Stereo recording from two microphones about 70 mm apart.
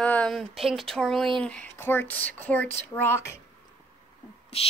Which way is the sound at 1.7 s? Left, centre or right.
Left.